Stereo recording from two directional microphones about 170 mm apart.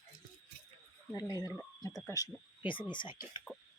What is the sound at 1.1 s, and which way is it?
Speech, 20° left (ahead or behind).